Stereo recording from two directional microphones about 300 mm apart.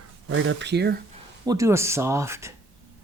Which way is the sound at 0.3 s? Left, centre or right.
Right.